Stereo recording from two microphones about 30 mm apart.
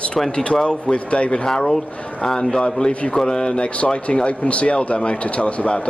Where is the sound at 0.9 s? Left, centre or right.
Left.